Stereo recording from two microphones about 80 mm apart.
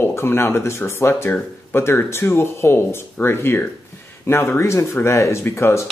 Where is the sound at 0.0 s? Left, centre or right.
Left.